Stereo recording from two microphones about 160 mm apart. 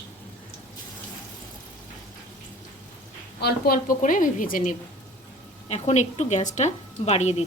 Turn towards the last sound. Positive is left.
turn(degrees=45)  # may be behind; listen again after turning